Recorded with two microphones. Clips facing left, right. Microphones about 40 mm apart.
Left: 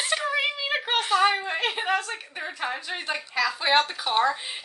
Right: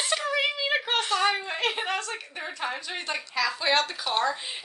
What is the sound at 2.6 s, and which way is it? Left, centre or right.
Speech, centre.